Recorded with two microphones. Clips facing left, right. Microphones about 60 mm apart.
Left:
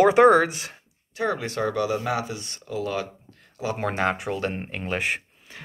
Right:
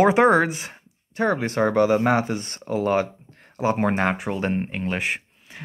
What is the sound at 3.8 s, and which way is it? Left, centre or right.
Speech, centre.